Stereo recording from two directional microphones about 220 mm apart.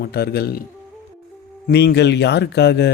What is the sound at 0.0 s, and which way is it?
Speech, 45° left (ahead or behind).